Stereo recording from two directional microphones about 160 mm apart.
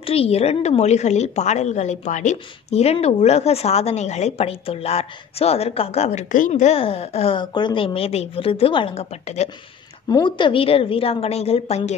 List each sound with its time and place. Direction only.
0.0 s a woman's voice: 35° left (ahead or behind)
10.0 s a woman's voice: 25° left (ahead or behind)